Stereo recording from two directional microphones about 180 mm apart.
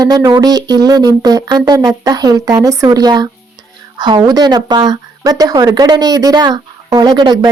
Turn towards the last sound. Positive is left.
turn(degrees=-25)  # may be behind; listen again after turning